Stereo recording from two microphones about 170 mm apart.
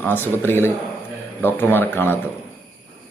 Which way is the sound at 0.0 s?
10° left (ahead or behind).